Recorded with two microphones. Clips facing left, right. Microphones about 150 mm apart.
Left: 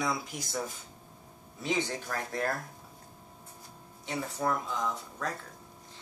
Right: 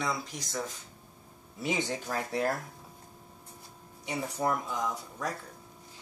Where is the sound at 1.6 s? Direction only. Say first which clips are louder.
Even; 15° right (ahead or behind).